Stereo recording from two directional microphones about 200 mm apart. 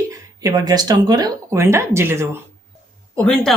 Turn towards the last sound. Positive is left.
turn(degrees=5)  # may be behind; listen again after turning